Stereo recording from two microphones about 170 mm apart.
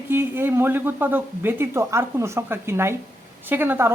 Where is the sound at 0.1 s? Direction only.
10° right (ahead or behind).